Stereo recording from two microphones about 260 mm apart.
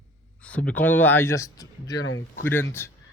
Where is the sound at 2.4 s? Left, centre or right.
Centre.